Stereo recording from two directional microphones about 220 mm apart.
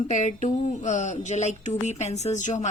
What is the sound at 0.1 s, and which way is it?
Speech, 30° left (ahead or behind).